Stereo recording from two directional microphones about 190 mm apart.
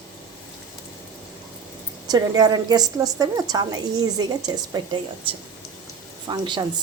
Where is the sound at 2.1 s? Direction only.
20° right (ahead or behind).